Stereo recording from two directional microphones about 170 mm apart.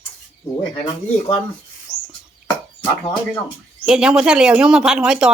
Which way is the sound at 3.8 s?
5° right (ahead or behind).